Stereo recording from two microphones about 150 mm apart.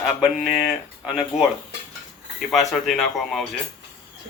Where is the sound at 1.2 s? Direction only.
5° right (ahead or behind).